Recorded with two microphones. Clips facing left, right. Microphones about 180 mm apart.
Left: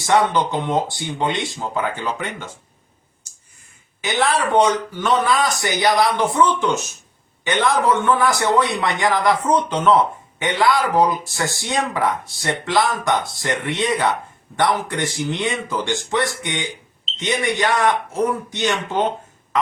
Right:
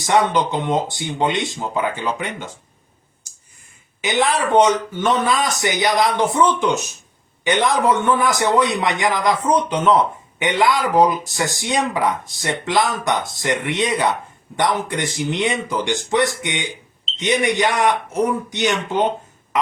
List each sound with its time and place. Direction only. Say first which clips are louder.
0.0 s a man's voice: even; 20° right (ahead or behind)
4.0 s a man's voice: right 1 dB; 20° right (ahead or behind)